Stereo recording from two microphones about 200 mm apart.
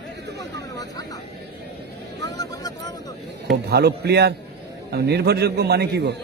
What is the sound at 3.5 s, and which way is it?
A man's voice, 55° right (ahead or behind).